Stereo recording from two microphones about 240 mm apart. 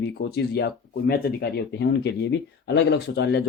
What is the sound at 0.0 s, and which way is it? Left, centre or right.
Speech, left.